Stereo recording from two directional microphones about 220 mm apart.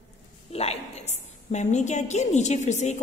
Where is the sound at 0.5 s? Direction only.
30° left (ahead or behind).